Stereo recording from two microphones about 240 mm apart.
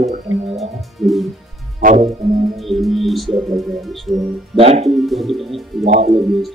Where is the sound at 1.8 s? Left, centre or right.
Right.